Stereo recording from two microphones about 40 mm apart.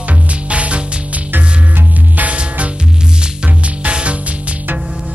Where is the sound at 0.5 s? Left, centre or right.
Right.